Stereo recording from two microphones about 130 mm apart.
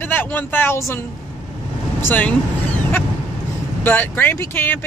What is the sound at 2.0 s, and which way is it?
Speech, 10° left (ahead or behind).